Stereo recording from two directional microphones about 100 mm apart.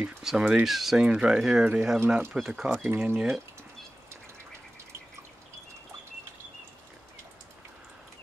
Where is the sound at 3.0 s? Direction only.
15° right (ahead or behind).